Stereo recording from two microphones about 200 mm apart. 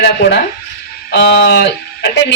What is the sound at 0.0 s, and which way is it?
A woman's voice, 55° left (ahead or behind).